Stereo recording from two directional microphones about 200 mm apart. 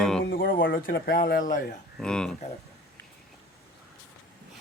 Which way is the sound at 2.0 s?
5° left (ahead or behind).